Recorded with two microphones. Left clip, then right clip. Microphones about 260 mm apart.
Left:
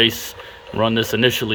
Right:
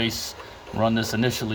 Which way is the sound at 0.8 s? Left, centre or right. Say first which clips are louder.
Left 5 dB; centre.